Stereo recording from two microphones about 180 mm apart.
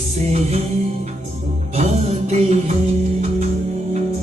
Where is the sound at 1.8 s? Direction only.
40° right (ahead or behind).